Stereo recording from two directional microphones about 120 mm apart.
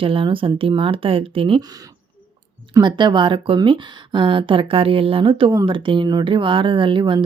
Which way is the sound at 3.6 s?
45° right (ahead or behind).